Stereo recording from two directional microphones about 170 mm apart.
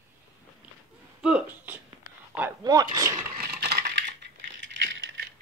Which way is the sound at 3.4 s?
65° right (ahead or behind).